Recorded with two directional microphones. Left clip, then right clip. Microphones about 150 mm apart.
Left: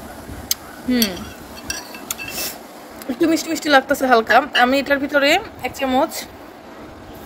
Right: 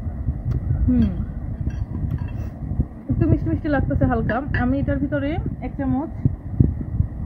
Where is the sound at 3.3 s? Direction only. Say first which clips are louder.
Left 10 dB; 25° left (ahead or behind); by 5.4 s 40° left (ahead or behind).